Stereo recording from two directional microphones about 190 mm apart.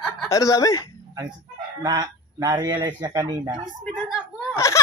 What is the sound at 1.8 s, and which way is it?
Speech, 20° right (ahead or behind).